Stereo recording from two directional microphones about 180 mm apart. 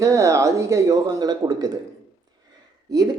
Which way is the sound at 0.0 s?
15° right (ahead or behind).